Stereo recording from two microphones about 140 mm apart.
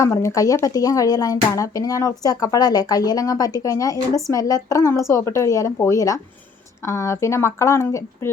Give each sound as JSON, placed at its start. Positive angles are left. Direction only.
{"t": 0.0, "sound": "speech", "side_deg": 20}